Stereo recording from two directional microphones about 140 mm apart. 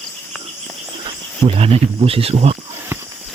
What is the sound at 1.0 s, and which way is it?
Speech, 40° right (ahead or behind).